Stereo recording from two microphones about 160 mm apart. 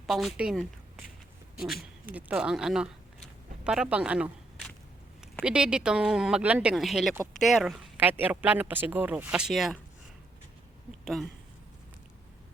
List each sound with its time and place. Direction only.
0.1 s a woman's voice: centre (ahead or behind)
7.9 s speech: 10° right (ahead or behind)
11.0 s speech: centre (ahead or behind)